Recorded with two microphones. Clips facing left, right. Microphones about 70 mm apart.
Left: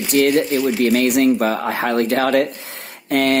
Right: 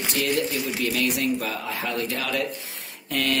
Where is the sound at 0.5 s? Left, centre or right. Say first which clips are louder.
Left 10 dB; left.